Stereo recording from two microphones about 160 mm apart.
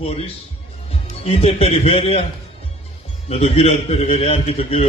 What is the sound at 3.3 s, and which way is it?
Speech, 40° left (ahead or behind).